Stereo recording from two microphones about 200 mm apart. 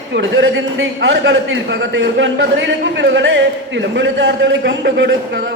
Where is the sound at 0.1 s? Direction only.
60° right (ahead or behind).